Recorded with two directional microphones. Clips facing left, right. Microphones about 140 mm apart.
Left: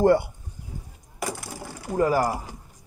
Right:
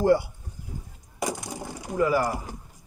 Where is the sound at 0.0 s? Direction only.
55° left (ahead or behind).